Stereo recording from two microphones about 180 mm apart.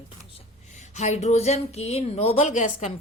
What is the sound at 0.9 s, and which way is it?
Speech, 40° left (ahead or behind).